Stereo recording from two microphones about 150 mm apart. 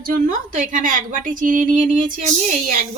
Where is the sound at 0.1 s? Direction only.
65° right (ahead or behind).